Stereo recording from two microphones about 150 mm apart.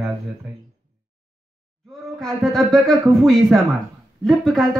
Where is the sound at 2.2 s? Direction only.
5° left (ahead or behind).